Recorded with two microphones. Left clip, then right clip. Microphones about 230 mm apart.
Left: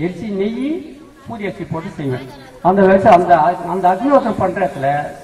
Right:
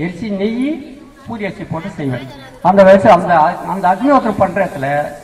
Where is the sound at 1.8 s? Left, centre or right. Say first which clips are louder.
Right 3 dB; right.